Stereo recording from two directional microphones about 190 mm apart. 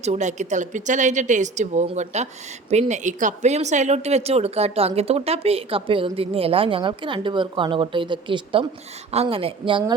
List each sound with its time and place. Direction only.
0.0 s a woman's voice: 35° right (ahead or behind)